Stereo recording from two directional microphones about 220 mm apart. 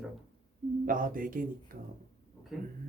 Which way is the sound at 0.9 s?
40° right (ahead or behind).